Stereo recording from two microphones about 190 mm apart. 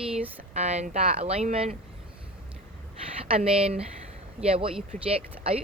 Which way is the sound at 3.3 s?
30° right (ahead or behind).